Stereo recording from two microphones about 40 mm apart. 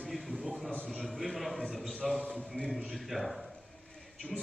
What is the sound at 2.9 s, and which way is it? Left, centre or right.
Speech, centre.